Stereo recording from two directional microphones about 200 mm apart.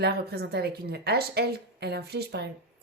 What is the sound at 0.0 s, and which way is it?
Speech, 55° right (ahead or behind).